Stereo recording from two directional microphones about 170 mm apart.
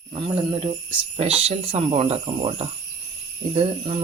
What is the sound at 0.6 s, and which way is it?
Speech, 35° right (ahead or behind).